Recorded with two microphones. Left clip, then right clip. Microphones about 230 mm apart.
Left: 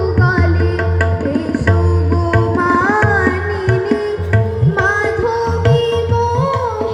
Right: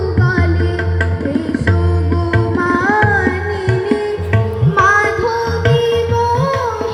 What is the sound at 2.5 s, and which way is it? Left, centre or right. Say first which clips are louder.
Tabla: even; right.